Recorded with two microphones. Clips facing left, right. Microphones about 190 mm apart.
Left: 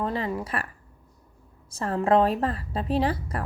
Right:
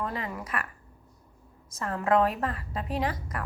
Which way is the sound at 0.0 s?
30° left (ahead or behind).